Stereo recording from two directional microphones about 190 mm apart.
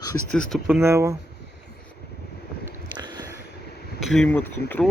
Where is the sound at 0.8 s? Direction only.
15° right (ahead or behind).